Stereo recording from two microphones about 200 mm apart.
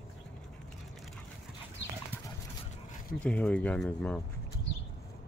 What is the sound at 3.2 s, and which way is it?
Speech, 5° left (ahead or behind).